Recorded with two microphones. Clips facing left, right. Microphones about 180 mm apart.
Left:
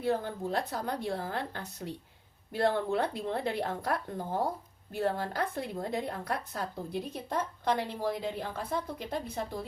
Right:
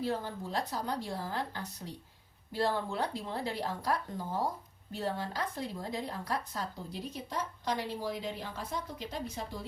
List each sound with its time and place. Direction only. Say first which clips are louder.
0.0 s a woman's voice: left 4 dB; 55° left (ahead or behind)